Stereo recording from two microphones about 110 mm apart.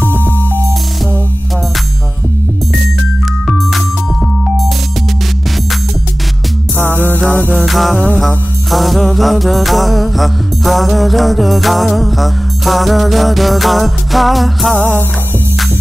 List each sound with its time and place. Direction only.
0.1 s music: 20° right (ahead or behind)
3.4 s music: centre (ahead or behind)
6.8 s music: 15° left (ahead or behind)
7.6 s music: centre (ahead or behind)
14.8 s music: 15° left (ahead or behind)